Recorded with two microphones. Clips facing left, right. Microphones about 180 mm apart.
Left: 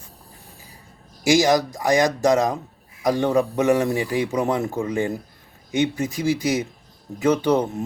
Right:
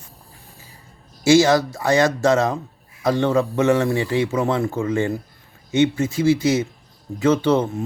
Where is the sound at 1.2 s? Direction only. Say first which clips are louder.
Right 3 dB; 15° left (ahead or behind).